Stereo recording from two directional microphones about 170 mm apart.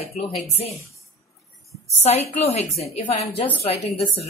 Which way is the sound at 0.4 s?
40° left (ahead or behind).